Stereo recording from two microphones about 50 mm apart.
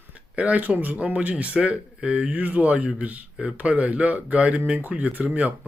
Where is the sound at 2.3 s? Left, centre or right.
Right.